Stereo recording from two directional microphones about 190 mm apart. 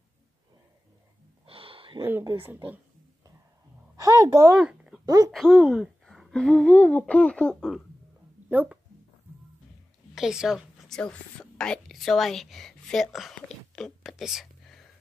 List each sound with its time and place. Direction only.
1.4 s a sound: 30° right (ahead or behind)
3.9 s a woman's voice: 20° right (ahead or behind)
4.6 s a sound: 5° right (ahead or behind)
5.0 s speech: 20° right (ahead or behind)
5.3 s speech: centre (ahead or behind)
8.5 s speech: 10° right (ahead or behind)
10.1 s a woman's voice: 5° right (ahead or behind)